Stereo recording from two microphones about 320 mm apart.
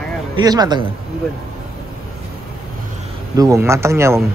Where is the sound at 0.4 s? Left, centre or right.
Centre.